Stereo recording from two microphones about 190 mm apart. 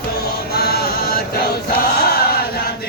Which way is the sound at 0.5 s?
55° left (ahead or behind).